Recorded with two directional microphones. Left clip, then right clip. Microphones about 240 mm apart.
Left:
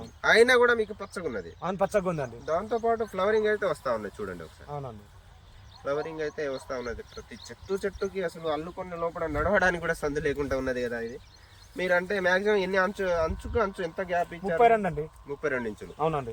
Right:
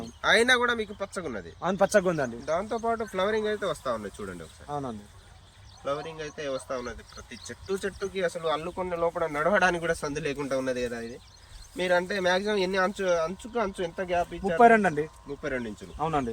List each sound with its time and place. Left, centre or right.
0.2 s speech: centre
1.6 s speech: left
2.5 s speech: centre
4.7 s speech: left
5.8 s speech: centre
14.7 s speech: left
15.4 s speech: centre
16.0 s speech: left